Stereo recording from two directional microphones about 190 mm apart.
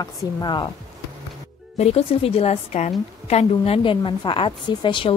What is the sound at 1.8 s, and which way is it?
A woman's voice, 35° left (ahead or behind).